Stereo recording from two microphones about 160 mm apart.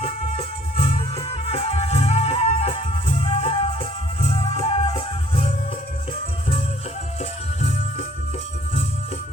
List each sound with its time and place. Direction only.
0.0 s music: 40° left (ahead or behind)
7.2 s music: 45° left (ahead or behind)